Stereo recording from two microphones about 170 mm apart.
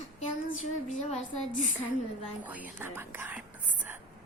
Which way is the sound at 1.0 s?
45° left (ahead or behind).